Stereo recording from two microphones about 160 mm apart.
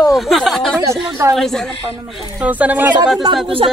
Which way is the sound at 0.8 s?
20° right (ahead or behind).